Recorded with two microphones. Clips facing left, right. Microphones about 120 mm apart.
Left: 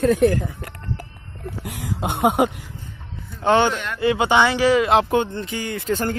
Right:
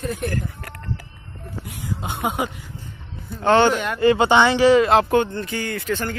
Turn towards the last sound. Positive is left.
turn(degrees=45)  # may be behind; listen again after turning